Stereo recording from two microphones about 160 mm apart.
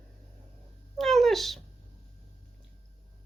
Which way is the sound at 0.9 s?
Centre (ahead or behind).